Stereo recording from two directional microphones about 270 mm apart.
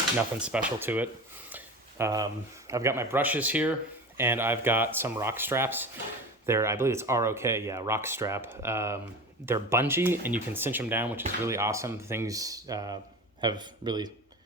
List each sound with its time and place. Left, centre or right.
0.3 s speech: centre